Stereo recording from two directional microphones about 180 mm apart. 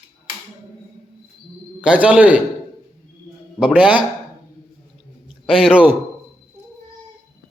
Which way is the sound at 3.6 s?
5° right (ahead or behind).